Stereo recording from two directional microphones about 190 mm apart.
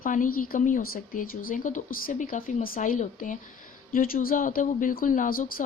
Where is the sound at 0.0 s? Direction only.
45° left (ahead or behind).